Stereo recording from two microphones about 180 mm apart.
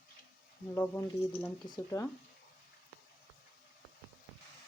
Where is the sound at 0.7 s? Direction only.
15° left (ahead or behind).